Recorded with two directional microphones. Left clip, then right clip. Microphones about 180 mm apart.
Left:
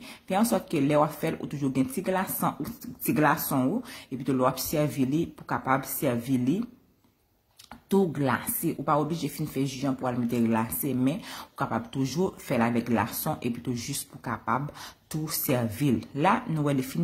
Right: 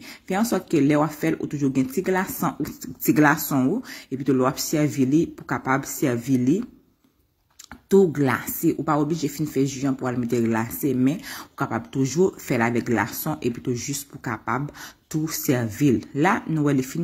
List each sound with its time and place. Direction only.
0.3 s speech: 15° right (ahead or behind)
7.9 s speech: 15° right (ahead or behind)